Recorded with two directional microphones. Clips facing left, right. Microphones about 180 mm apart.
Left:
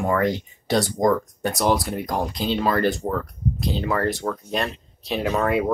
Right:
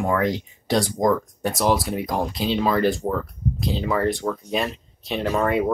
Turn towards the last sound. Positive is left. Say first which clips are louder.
# even
turn(degrees=0)  # may be behind; listen again after turning